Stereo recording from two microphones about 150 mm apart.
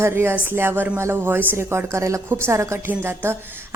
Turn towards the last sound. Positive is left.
turn(degrees=-15)  # may be behind; listen again after turning